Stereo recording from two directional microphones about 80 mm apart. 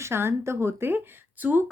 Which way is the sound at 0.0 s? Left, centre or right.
Right.